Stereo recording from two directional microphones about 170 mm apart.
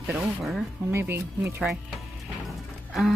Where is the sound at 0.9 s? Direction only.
15° right (ahead or behind).